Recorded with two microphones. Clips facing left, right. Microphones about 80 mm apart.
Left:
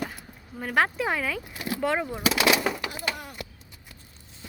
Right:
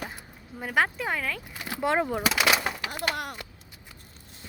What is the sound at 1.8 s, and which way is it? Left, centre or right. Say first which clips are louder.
Speech: right 2 dB; right.